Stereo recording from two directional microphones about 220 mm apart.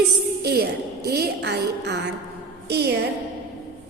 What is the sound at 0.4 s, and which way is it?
A woman's voice, 45° right (ahead or behind).